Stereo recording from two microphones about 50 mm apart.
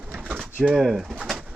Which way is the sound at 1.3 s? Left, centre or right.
Centre.